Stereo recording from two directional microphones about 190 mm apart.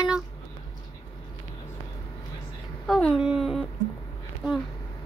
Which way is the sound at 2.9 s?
5° left (ahead or behind).